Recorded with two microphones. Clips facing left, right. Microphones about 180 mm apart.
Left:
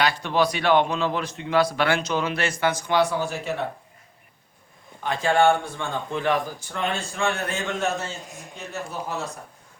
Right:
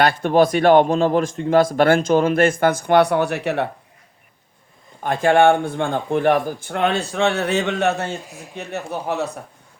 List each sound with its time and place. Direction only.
0.0 s speech: 50° right (ahead or behind); by 3.7 s 65° right (ahead or behind)
5.0 s speech: 50° right (ahead or behind)
8.3 s speech: 5° right (ahead or behind)
8.5 s speech: 65° right (ahead or behind)